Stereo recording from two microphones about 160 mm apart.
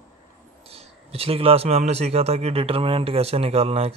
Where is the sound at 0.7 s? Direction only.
40° right (ahead or behind).